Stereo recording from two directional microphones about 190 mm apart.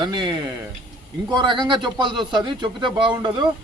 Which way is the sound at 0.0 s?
25° right (ahead or behind).